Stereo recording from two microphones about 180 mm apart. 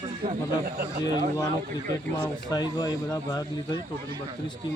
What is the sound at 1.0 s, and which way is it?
Speech, 20° left (ahead or behind).